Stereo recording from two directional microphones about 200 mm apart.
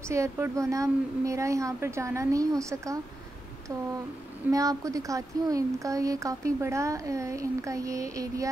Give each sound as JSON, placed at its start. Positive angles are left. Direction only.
{"t": 0.1, "sound": "speech", "side_deg": -15}
{"t": 4.5, "sound": "speech", "side_deg": -15}